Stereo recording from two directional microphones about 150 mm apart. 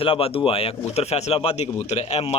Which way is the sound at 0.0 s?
40° left (ahead or behind).